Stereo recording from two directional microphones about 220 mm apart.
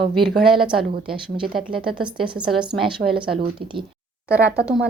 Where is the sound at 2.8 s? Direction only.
25° right (ahead or behind).